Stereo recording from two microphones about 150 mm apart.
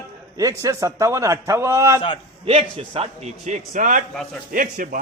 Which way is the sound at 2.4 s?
40° right (ahead or behind).